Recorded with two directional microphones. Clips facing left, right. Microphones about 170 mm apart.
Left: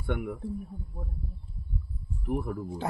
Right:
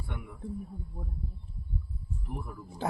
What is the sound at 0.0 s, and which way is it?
Speech, 65° left (ahead or behind).